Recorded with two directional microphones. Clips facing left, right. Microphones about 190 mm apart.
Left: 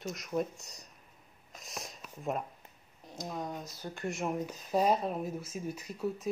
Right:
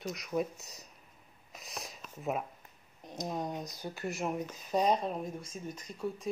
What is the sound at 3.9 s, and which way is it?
Speech, centre (ahead or behind).